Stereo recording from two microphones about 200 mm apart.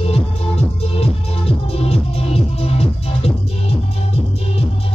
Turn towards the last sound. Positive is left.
turn(degrees=30)  # may be behind; listen again after turning